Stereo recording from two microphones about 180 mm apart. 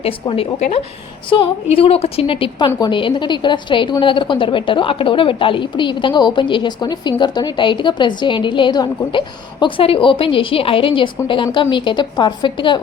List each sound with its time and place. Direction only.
0.0 s a woman's voice: 35° left (ahead or behind)